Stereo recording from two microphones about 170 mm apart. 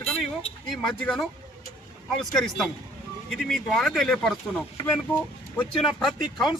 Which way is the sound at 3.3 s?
Centre (ahead or behind).